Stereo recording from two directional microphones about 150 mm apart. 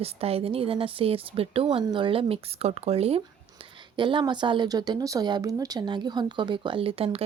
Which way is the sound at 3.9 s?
30° right (ahead or behind).